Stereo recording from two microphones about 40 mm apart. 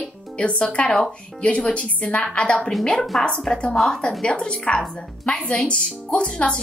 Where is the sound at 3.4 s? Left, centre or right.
Left.